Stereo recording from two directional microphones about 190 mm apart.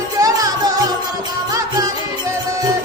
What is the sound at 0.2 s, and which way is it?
Music, 20° right (ahead or behind).